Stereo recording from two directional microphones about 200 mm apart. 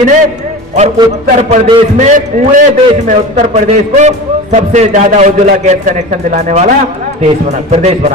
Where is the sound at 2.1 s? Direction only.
40° right (ahead or behind).